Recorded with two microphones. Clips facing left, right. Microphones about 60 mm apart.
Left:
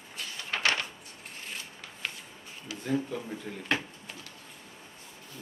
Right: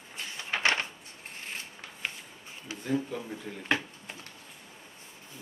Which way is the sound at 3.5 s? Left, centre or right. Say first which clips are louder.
Left 1 dB; centre.